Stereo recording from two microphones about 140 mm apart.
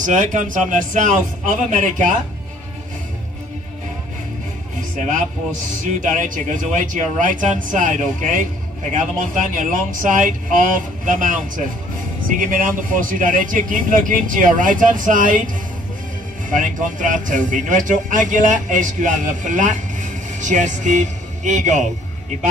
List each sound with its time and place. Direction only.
0.0 s speech: 65° right (ahead or behind)
4.7 s music: 70° right (ahead or behind)
5.9 s a man's voice: 65° right (ahead or behind)
9.6 s a man's voice: 65° right (ahead or behind)